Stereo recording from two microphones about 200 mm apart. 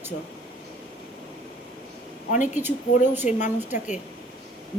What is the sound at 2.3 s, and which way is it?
Speech, 40° left (ahead or behind).